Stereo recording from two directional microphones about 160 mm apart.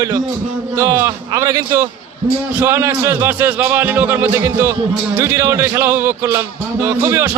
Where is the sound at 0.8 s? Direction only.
20° right (ahead or behind).